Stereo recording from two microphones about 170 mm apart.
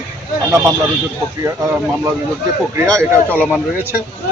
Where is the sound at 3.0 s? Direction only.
10° left (ahead or behind).